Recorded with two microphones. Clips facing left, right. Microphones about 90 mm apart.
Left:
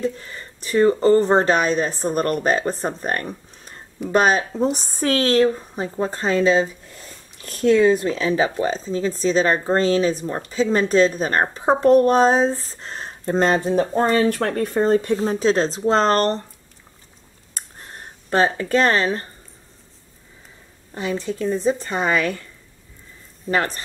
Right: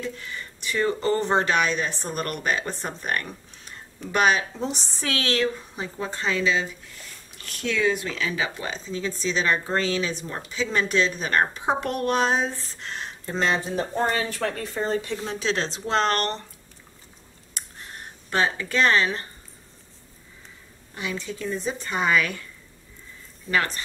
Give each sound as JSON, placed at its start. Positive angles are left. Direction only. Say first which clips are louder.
{"t": 0.0, "sound": "speech", "louder": "left 7 dB", "side_deg": 35}
{"t": 3.0, "sound": "a sound", "louder": "left 4 dB", "side_deg": 35}
{"t": 4.1, "sound": "speech", "louder": "left 4 dB", "side_deg": 40}
{"t": 15.1, "sound": "speech", "louder": "left 8 dB", "side_deg": 40}
{"t": 17.6, "sound": "a sound", "louder": "left 1 dB", "side_deg": 40}
{"t": 18.3, "sound": "speech", "louder": "left 6 dB", "side_deg": 40}
{"t": 20.9, "sound": "speech", "louder": "left 7 dB", "side_deg": 35}
{"t": 23.5, "sound": "speech", "louder": "left 3 dB", "side_deg": 35}